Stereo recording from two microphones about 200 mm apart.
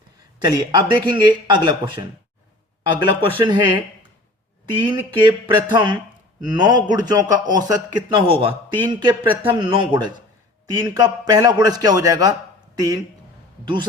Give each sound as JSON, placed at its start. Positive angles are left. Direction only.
{"t": 0.3, "sound": "a man's voice", "side_deg": -20}